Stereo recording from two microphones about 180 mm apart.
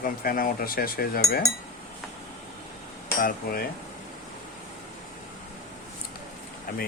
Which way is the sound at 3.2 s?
50° left (ahead or behind).